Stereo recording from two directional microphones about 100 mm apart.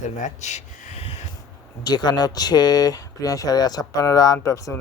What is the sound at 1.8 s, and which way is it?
Speech, 45° left (ahead or behind).